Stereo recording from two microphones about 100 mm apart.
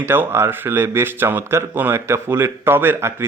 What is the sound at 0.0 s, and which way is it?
Speech, 20° right (ahead or behind).